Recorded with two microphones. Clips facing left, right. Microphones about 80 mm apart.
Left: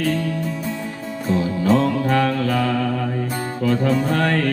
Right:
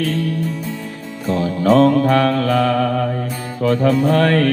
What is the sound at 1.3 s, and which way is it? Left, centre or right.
Mantra, right.